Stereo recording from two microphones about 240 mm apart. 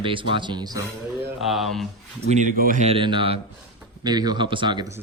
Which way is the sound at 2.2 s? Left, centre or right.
Right.